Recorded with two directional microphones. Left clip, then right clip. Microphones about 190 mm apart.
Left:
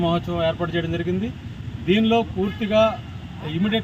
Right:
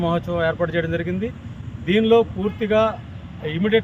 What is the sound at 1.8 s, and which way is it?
Speech, 25° right (ahead or behind).